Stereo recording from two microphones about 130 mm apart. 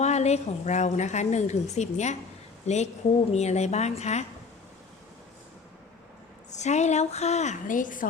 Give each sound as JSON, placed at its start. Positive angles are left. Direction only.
{"t": 0.0, "sound": "a woman's voice", "side_deg": 60}
{"t": 6.5, "sound": "a woman's voice", "side_deg": 60}